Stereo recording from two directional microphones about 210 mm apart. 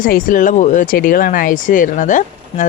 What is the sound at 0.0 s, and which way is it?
Speech, 40° left (ahead or behind).